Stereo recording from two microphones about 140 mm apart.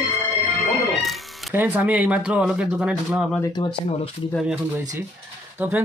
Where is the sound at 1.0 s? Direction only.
Centre (ahead or behind).